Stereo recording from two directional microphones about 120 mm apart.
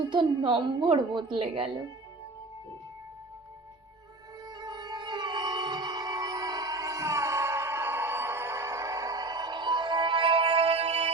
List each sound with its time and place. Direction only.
0.1 s speech: 40° right (ahead or behind)
4.6 s music: 35° right (ahead or behind); by 11.1 s 65° right (ahead or behind)